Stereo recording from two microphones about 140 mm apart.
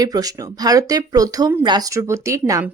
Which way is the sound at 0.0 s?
25° right (ahead or behind).